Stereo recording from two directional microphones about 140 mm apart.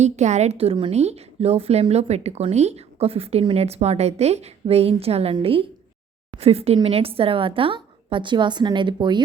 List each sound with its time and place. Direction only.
0.0 s a woman's voice: 55° right (ahead or behind); by 9.2 s 35° right (ahead or behind)